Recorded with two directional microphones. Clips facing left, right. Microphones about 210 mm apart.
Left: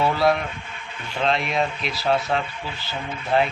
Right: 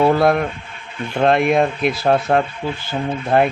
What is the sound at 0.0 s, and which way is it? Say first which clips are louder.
Speech: right 6 dB; 55° right (ahead or behind).